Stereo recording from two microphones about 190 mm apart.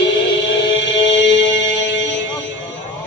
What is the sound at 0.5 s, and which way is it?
Mantra, 70° left (ahead or behind).